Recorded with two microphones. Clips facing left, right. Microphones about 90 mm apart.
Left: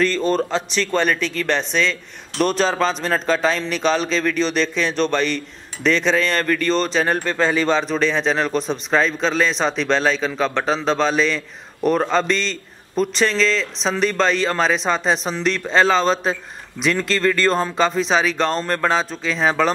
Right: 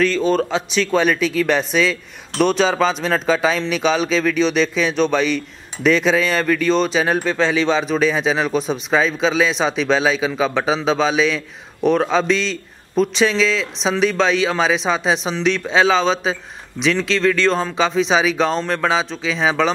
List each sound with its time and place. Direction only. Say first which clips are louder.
0.0 s speech: right 2 dB; centre (ahead or behind)